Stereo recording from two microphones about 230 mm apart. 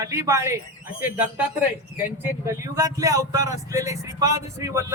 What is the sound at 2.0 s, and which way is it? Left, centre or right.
Speech, centre.